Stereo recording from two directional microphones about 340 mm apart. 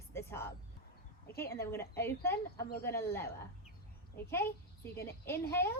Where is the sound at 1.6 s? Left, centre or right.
Centre.